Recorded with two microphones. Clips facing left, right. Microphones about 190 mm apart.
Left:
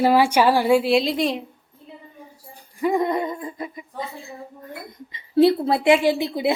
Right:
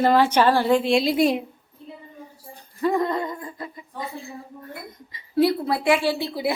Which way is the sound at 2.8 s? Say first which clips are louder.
Left 1 dB; 15° left (ahead or behind).